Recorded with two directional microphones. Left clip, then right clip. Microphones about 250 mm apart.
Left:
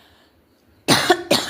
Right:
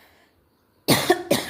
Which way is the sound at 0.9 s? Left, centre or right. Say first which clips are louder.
Left 4 dB; centre.